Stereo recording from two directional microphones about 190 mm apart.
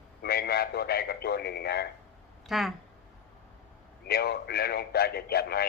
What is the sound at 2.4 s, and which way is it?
Speech, centre (ahead or behind).